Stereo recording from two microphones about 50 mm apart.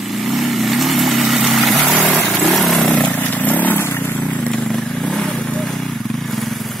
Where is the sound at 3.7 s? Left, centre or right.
Left.